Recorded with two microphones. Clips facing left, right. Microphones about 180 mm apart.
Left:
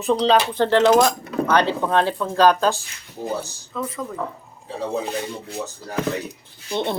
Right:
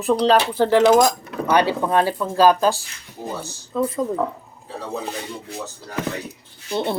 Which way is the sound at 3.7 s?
30° right (ahead or behind).